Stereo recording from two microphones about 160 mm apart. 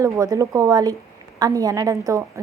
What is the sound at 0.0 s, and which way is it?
A woman's voice, 20° right (ahead or behind).